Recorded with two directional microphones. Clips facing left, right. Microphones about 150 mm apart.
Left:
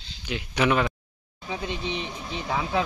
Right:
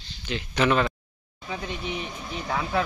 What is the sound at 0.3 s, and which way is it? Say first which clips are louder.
Speech: even; 10° left (ahead or behind).